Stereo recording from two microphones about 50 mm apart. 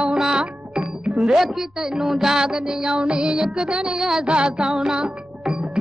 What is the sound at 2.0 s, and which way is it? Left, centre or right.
Music, centre.